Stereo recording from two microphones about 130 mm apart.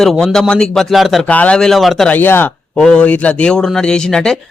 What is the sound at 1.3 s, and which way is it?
Speech, 10° left (ahead or behind).